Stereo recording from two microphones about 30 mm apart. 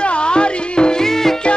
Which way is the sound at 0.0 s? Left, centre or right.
Left.